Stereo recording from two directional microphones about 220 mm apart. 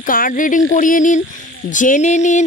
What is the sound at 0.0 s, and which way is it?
Speech, 40° left (ahead or behind).